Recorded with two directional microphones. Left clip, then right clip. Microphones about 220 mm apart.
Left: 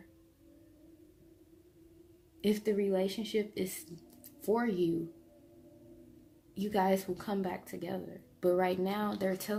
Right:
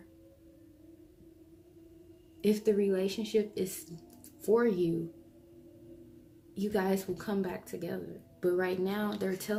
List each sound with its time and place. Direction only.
2.4 s speech: 35° left (ahead or behind)
6.5 s speech: 35° left (ahead or behind)